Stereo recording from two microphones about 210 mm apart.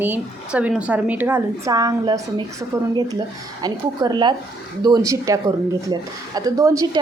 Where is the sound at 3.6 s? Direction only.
20° right (ahead or behind).